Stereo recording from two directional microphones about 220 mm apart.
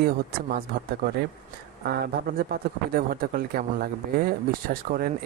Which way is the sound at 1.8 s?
45° right (ahead or behind).